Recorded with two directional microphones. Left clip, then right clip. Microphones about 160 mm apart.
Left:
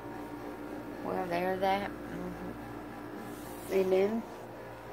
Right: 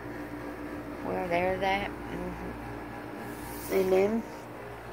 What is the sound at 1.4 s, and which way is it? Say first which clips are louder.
Speech: left 1 dB; 70° left (ahead or behind).